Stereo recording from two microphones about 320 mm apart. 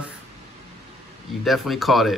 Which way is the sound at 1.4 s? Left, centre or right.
Centre.